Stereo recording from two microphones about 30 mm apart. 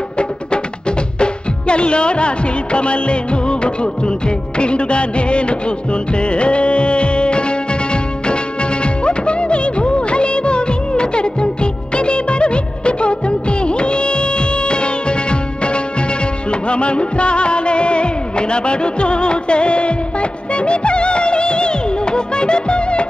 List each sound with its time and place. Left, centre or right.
0.2 s music: left
4.6 s music of bollywood: left
6.1 s music: left
8.8 s music of bollywood: left
16.4 s music: left